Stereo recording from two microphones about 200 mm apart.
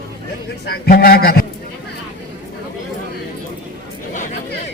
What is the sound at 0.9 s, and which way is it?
Speech, 50° left (ahead or behind).